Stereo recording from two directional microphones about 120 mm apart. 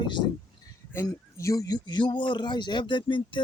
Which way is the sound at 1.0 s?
30° left (ahead or behind).